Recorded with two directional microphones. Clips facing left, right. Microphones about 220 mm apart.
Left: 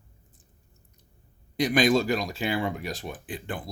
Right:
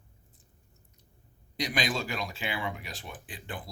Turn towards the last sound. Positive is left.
turn(degrees=50)  # may be behind; listen again after turning